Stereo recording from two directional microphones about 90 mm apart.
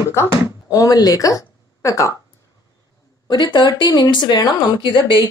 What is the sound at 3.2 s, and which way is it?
Speech, 60° left (ahead or behind).